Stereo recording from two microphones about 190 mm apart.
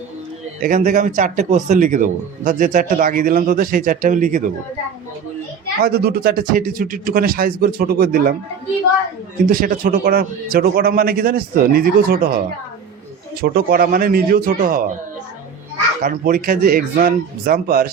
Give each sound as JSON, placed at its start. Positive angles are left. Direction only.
{"t": 0.6, "sound": "a man's voice", "side_deg": -45}
{"t": 5.8, "sound": "a man's voice", "side_deg": -55}
{"t": 9.5, "sound": "a man's voice", "side_deg": -50}
{"t": 13.4, "sound": "a man's voice", "side_deg": -55}
{"t": 16.0, "sound": "a man's voice", "side_deg": -50}